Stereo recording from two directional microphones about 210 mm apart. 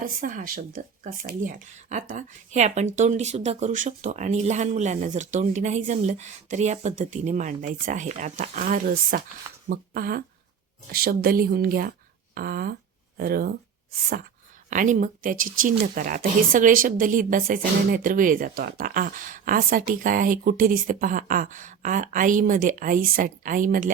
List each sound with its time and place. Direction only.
0.0 s a woman's voice: 40° right (ahead or behind)
14.7 s a woman's voice: 35° right (ahead or behind)